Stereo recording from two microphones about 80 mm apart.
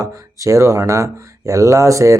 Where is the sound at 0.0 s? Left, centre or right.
Right.